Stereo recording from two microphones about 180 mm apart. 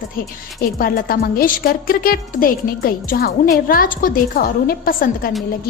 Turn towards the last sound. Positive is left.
turn(degrees=55)  # may be behind; listen again after turning